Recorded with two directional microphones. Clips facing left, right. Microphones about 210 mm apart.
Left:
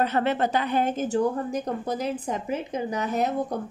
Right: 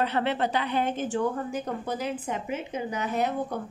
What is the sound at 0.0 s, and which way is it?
A woman's voice, 45° left (ahead or behind).